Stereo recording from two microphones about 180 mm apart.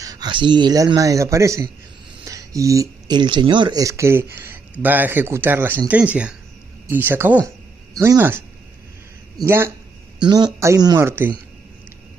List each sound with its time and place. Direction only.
0.0 s a man's voice: 20° right (ahead or behind)
10.2 s a man's voice: 25° right (ahead or behind)